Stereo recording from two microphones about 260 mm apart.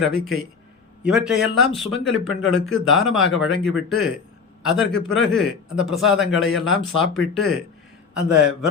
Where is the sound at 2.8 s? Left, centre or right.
Centre.